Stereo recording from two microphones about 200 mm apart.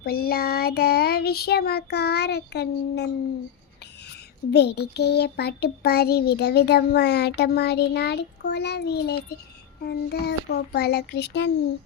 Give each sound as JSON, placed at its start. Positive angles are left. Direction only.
{"t": 0.0, "sound": "child singing", "side_deg": 50}
{"t": 4.5, "sound": "child singing", "side_deg": 55}